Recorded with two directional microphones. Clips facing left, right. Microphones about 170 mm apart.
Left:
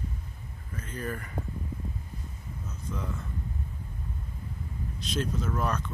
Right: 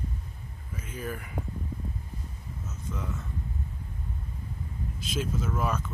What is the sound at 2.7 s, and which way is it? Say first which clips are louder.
Speech: even; 5° right (ahead or behind).